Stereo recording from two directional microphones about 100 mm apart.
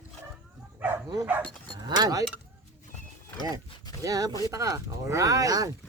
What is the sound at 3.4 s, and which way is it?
Speech, 40° right (ahead or behind).